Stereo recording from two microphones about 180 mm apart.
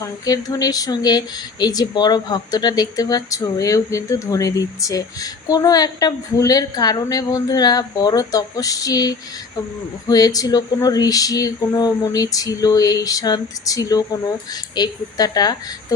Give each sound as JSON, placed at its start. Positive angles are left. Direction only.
{"t": 0.0, "sound": "speech", "side_deg": 20}